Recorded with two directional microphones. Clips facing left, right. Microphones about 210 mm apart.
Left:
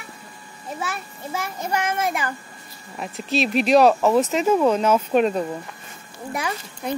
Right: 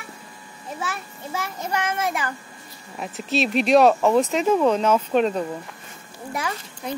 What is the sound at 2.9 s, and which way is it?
A woman's voice, centre (ahead or behind).